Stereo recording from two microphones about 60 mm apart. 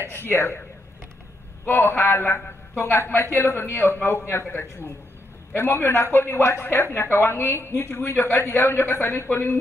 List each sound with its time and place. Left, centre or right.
0.1 s a woman's voice: left
1.7 s a woman's voice: left